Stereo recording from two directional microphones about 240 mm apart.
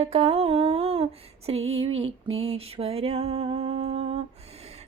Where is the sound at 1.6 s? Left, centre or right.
Right.